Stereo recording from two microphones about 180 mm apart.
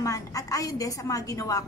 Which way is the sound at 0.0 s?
20° left (ahead or behind).